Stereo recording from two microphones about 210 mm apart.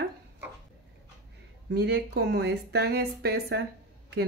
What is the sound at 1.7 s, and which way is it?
A woman's voice, 55° right (ahead or behind).